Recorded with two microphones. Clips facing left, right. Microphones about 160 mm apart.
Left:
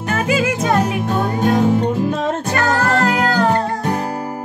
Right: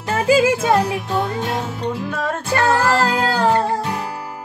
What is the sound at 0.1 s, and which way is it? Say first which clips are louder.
Music: right 3 dB; 30° right (ahead or behind).